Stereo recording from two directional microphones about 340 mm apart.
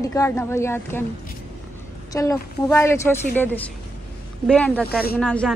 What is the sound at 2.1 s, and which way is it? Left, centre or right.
A woman's voice, centre.